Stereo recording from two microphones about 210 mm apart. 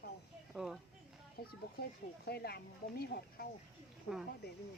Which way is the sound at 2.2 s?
50° left (ahead or behind).